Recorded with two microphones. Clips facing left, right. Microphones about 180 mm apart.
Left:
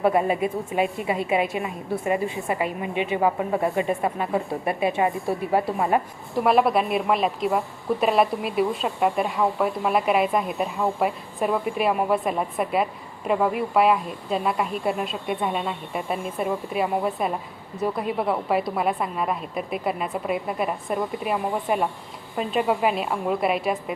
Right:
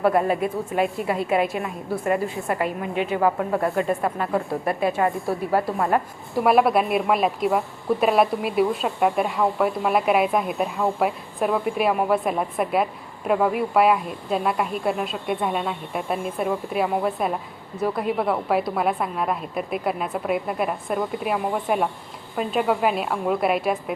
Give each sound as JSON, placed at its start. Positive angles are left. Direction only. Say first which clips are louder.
{"t": 0.0, "sound": "a woman's voice", "louder": "right 1 dB", "side_deg": 5}
{"t": 2.9, "sound": "a woman's voice", "louder": "even", "side_deg": -45}
{"t": 3.2, "sound": "speech", "louder": "right 1 dB", "side_deg": 5}
{"t": 6.3, "sound": "a woman's voice", "louder": "right 1 dB", "side_deg": -5}